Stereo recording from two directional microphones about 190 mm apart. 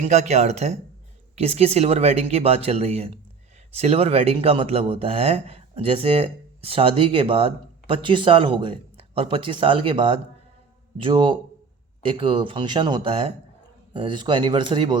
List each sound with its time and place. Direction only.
0.0 s speech: 35° right (ahead or behind)